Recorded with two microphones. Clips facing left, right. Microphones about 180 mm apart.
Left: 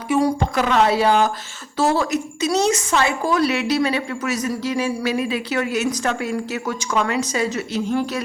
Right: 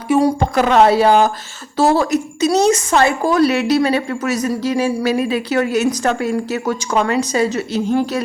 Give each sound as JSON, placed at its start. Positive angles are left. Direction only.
{"t": 0.1, "sound": "a woman's voice", "side_deg": -35}